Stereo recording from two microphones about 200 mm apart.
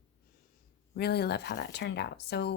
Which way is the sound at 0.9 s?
55° left (ahead or behind).